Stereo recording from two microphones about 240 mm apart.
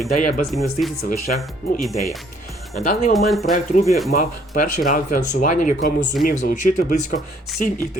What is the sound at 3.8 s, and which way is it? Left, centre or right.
Speech, left.